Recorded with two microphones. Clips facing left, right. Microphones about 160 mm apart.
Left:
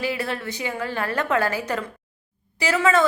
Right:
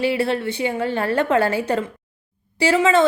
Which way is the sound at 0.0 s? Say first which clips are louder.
Right 7 dB; 30° right (ahead or behind).